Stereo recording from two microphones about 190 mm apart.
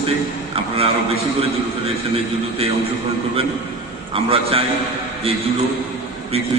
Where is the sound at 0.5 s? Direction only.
30° right (ahead or behind).